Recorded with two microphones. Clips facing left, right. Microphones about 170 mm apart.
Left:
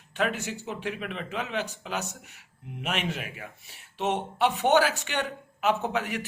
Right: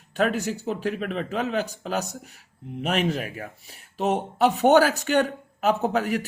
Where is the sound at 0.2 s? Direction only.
40° right (ahead or behind).